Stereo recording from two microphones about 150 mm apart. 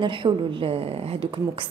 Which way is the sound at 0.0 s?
35° right (ahead or behind).